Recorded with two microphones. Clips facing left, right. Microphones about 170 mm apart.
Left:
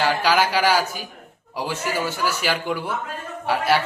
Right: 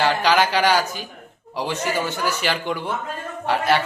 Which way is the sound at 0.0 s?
5° left (ahead or behind).